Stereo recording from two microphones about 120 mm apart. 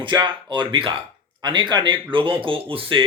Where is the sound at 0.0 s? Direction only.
40° right (ahead or behind).